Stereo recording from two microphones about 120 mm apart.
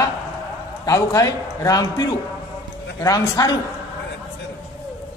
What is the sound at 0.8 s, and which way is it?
A man's voice, 30° left (ahead or behind).